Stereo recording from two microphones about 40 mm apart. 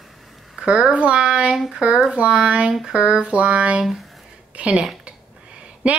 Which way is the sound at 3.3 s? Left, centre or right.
Right.